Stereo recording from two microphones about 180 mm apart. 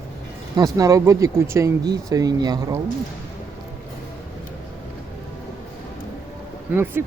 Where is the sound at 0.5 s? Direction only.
20° right (ahead or behind).